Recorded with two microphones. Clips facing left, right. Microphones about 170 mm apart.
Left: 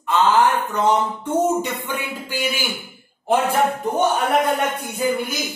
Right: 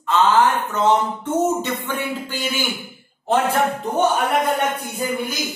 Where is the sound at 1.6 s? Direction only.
10° left (ahead or behind).